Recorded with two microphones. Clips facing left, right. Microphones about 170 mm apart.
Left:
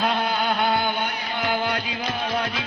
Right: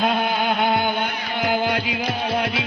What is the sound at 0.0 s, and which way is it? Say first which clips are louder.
Music: right 2 dB; 20° right (ahead or behind).